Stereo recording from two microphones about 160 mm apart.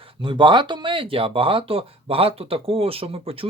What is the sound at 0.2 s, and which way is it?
Speech, 30° right (ahead or behind).